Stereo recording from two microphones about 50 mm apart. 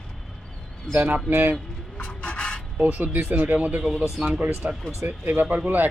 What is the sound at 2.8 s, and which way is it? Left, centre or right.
Speech, right.